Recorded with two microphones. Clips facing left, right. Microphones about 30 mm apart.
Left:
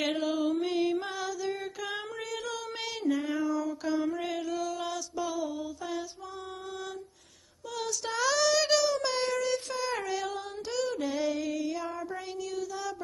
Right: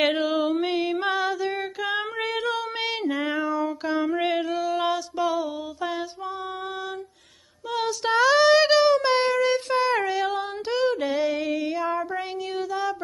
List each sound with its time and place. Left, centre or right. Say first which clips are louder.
0.0 s music: right 8 dB; right
0.3 s music: right 5 dB; right
1.1 s female singing: right 10 dB; right
1.4 s child singing: right 7 dB; right
2.0 s child singing: right 9 dB; right
3.3 s female singing: right 5 dB; right
4.7 s music: right 9 dB; right
7.7 s female singing: right 10 dB; right
8.8 s a sound: right 9 dB; right
9.4 s music: right 9 dB; right
10.2 s female singing: right 9 dB; right
11.3 s music: right 6 dB; right
11.7 s child singing: right 9 dB; right